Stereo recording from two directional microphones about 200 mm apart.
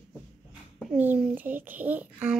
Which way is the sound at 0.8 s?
5° right (ahead or behind).